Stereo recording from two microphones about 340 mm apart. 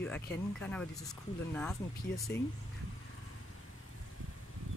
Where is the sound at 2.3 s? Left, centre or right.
Left.